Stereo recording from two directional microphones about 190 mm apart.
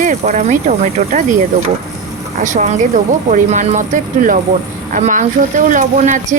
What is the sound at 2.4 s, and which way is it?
A woman's voice, 40° right (ahead or behind).